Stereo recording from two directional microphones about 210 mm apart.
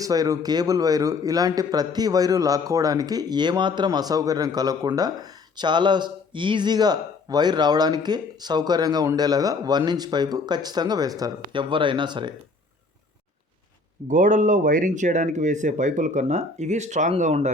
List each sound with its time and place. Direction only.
0.0 s speech: 15° right (ahead or behind)
14.1 s speech: 35° right (ahead or behind)